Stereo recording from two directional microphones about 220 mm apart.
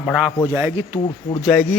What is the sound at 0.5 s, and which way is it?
Speech, 10° right (ahead or behind).